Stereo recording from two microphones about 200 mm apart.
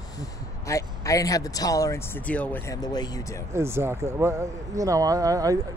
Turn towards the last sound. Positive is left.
turn(degrees=-15)  # may be behind; listen again after turning